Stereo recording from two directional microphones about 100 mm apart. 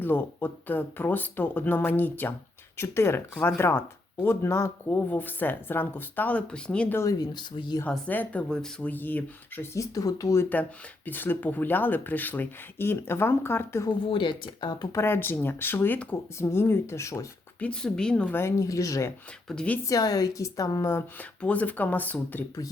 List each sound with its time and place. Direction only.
0.0 s speech: 20° left (ahead or behind)
6.9 s a woman's voice: 35° left (ahead or behind)
7.3 s speech: 50° left (ahead or behind)
7.9 s speech: 15° left (ahead or behind)
8.9 s speech: 20° left (ahead or behind)
9.7 s a woman's voice: 35° left (ahead or behind)
10.5 s speech: 15° left (ahead or behind)
14.0 s speech: 60° left (ahead or behind)
14.9 s speech: 20° left (ahead or behind)
17.6 s speech: 10° left (ahead or behind)
18.3 s a woman's voice: 30° left (ahead or behind)
19.5 s speech: 10° left (ahead or behind)
19.8 s a woman's voice: 35° left (ahead or behind)
21.2 s speech: 15° left (ahead or behind)